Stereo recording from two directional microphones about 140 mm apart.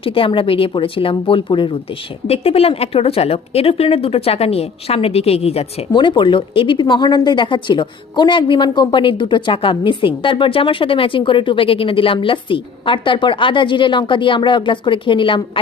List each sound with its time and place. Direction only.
0.0 s speech: 40° left (ahead or behind)
2.2 s a woman's voice: 45° left (ahead or behind)
5.9 s speech: 35° left (ahead or behind)